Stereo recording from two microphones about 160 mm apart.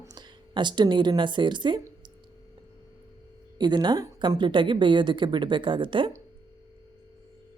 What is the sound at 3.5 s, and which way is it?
Speech, 25° right (ahead or behind).